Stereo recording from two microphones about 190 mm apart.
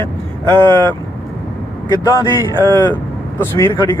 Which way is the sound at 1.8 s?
20° left (ahead or behind).